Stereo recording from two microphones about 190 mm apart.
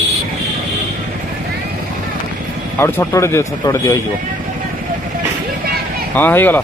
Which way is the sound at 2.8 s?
10° left (ahead or behind).